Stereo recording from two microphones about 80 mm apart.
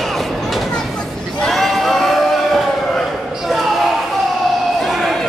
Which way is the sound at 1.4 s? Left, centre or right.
Centre.